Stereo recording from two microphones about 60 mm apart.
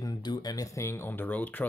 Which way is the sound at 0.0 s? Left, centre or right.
Left.